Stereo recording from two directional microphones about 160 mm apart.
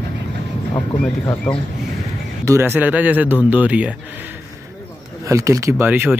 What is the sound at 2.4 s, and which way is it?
Speech, 15° right (ahead or behind).